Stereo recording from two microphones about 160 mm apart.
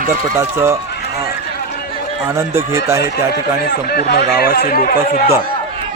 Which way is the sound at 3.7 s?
80° left.